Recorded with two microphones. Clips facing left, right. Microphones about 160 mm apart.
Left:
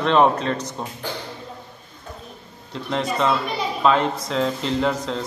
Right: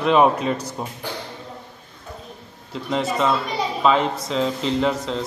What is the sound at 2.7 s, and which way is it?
A man's voice, centre (ahead or behind).